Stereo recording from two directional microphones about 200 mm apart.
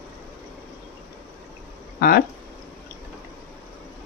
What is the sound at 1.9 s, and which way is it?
Speech, 50° left (ahead or behind).